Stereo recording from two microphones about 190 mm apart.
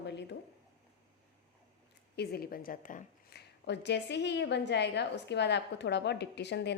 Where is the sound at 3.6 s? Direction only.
65° left (ahead or behind).